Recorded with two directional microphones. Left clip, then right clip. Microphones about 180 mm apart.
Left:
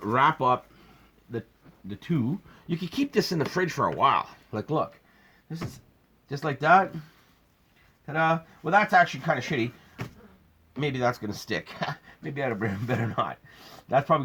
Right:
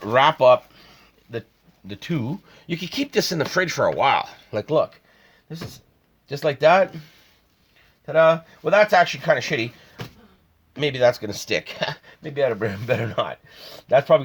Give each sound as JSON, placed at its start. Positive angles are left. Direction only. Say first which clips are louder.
{"t": 0.0, "sound": "speech", "louder": "right 7 dB", "side_deg": -50}
{"t": 1.9, "sound": "speech", "louder": "right 2 dB", "side_deg": -60}
{"t": 6.2, "sound": "speech", "louder": "right 6 dB", "side_deg": -50}
{"t": 8.0, "sound": "speech", "louder": "right 9 dB", "side_deg": -50}
{"t": 10.8, "sound": "speech", "louder": "right 8 dB", "side_deg": -50}